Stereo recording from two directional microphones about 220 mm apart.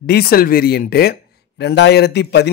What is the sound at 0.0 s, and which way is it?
A man's voice, 45° left (ahead or behind).